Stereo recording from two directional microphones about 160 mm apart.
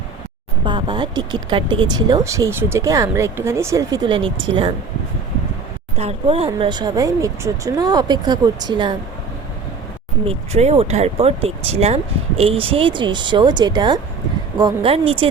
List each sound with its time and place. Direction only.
0.6 s speech: 30° right (ahead or behind)
6.0 s speech: 40° right (ahead or behind)
10.2 s speech: 40° right (ahead or behind)